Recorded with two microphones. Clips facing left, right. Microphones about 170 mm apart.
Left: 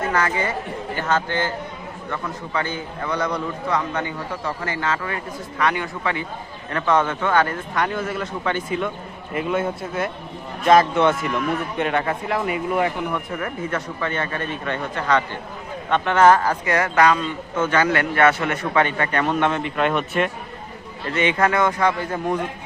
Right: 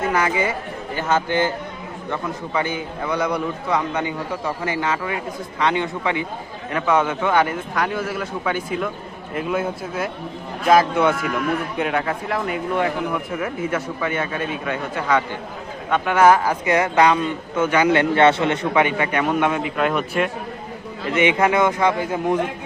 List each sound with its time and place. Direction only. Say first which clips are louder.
0.1 s a man's voice: right 2 dB; 10° right (ahead or behind)
6.7 s a man's voice: right 1 dB; 10° right (ahead or behind); by 18.6 s 25° right (ahead or behind)
18.6 s a man's voice: left 1 dB; 15° right (ahead or behind)
21.2 s a man's voice: right 2 dB; 15° right (ahead or behind)